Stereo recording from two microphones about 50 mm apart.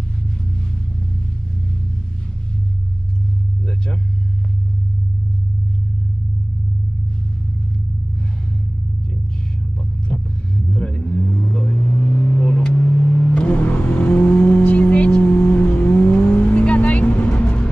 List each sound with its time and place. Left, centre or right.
3.6 s vehicle: centre
9.8 s vehicle: centre